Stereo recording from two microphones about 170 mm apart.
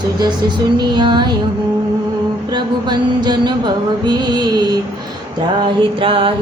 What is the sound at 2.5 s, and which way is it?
Music, 25° right (ahead or behind).